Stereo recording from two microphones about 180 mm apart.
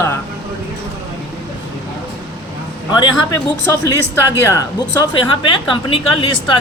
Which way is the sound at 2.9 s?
25° left (ahead or behind).